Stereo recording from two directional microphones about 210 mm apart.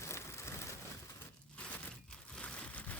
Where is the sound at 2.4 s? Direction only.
5° left (ahead or behind).